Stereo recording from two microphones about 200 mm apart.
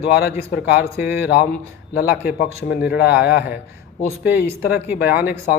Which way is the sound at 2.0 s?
45° left (ahead or behind).